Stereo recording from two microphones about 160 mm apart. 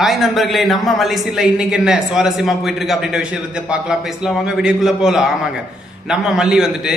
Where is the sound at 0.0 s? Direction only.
Centre (ahead or behind).